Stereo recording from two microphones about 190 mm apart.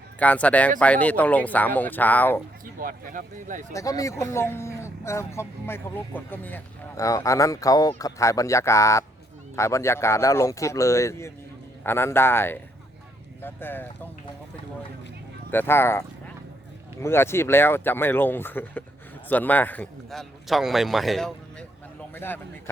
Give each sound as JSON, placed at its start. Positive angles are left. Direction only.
{"t": 0.2, "sound": "speech", "side_deg": 5}
{"t": 2.7, "sound": "speech", "side_deg": -45}
{"t": 3.7, "sound": "speech", "side_deg": 15}
{"t": 15.4, "sound": "a man's voice", "side_deg": 10}
{"t": 22.1, "sound": "speech", "side_deg": 10}